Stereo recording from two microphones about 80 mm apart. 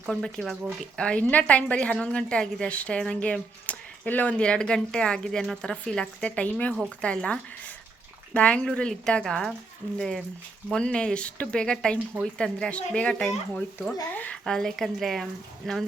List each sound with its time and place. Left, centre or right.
0.0 s speech: centre
0.9 s speech: centre
14.4 s speech: centre